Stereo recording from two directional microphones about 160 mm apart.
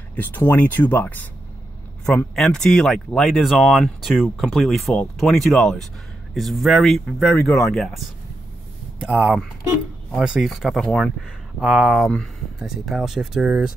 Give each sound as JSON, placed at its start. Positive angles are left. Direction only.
{"t": 0.1, "sound": "speech", "side_deg": 10}
{"t": 9.0, "sound": "speech", "side_deg": -5}